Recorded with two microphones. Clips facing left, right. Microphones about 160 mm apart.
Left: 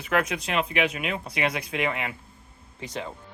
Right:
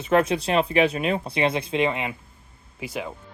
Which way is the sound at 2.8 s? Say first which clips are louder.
Right 3 dB; 10° right (ahead or behind).